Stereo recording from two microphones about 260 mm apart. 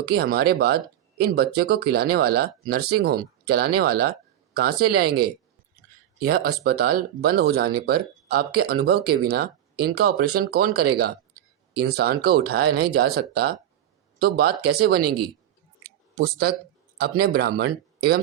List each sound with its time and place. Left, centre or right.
0.1 s speech: right
16.1 s speech: right